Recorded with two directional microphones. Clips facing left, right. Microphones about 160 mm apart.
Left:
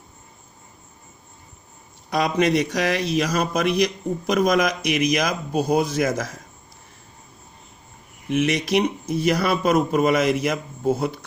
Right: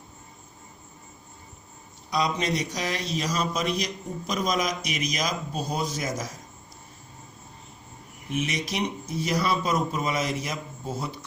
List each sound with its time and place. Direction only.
2.0 s a man's voice: 60° left (ahead or behind)
8.3 s a man's voice: 65° left (ahead or behind)